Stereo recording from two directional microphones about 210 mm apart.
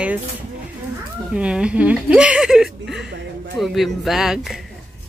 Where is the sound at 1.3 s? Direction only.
5° right (ahead or behind).